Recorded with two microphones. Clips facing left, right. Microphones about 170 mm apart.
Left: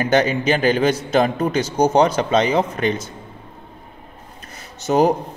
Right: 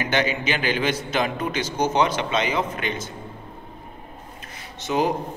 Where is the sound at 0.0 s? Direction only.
40° left (ahead or behind).